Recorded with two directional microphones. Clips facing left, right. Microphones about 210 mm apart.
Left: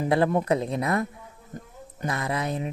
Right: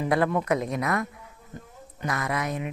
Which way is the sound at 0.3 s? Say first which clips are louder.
Left 2 dB; 30° left (ahead or behind).